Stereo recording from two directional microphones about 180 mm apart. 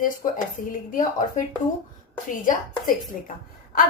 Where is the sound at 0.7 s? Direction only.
50° left (ahead or behind).